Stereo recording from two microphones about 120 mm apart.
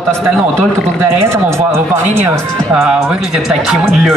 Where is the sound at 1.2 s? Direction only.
20° right (ahead or behind).